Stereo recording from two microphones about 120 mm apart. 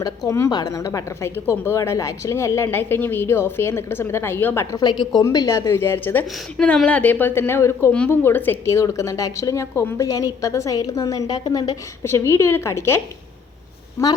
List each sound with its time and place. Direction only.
0.3 s a woman's voice: 25° left (ahead or behind)
4.6 s a woman's voice: 35° left (ahead or behind)
5.2 s a woman's voice: 30° left (ahead or behind)
6.6 s a woman's voice: 10° left (ahead or behind); by 11.8 s 35° left (ahead or behind)
12.0 s a woman's voice: 20° left (ahead or behind)